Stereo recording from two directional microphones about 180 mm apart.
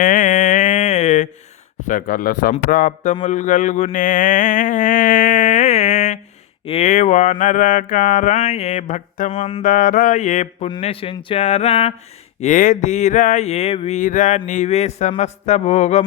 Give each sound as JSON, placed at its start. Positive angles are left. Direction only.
{"t": 0.0, "sound": "mantra", "side_deg": 45}
{"t": 10.7, "sound": "speech", "side_deg": 30}
{"t": 12.4, "sound": "speech", "side_deg": 45}